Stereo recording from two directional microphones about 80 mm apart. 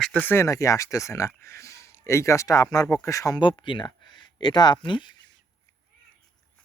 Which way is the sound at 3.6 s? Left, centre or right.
Left.